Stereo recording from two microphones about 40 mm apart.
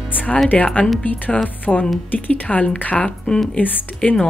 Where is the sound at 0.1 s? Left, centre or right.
Left.